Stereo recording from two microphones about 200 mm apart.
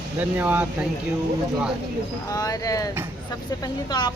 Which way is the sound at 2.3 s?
15° left (ahead or behind).